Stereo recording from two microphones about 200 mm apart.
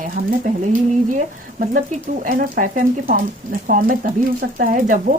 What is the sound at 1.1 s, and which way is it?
Speech, 40° right (ahead or behind).